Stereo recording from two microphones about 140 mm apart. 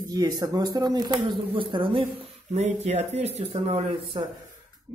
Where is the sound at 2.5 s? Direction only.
50° right (ahead or behind).